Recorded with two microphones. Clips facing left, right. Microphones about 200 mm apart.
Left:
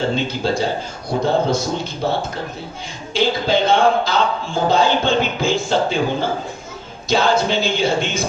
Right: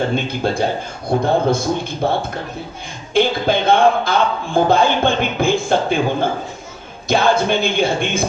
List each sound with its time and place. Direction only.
0.3 s a man's voice: 55° right (ahead or behind)
3.2 s a man's voice: 55° right (ahead or behind)